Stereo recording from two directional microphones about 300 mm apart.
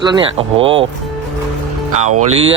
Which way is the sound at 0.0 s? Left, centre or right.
Centre.